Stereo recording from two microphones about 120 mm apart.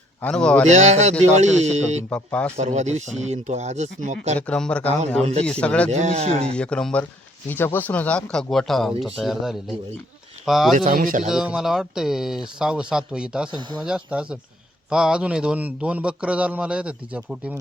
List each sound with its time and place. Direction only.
0.2 s speech: 10° left (ahead or behind)
0.7 s speech: 70° right (ahead or behind)
2.0 s speech: 10° left (ahead or behind)
2.6 s speech: 70° right (ahead or behind)
4.4 s speech: 10° left (ahead or behind)
5.2 s speech: 60° right (ahead or behind)
5.5 s speech: 10° left (ahead or behind)
5.9 s speech: 70° right (ahead or behind)
6.6 s speech: 10° left (ahead or behind)
10.8 s speech: 90° right
11.3 s a man's voice: 5° right (ahead or behind)